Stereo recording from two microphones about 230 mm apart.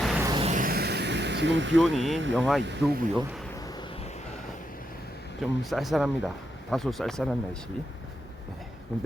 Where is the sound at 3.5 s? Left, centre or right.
Centre.